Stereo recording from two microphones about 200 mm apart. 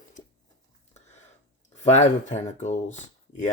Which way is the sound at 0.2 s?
35° left (ahead or behind).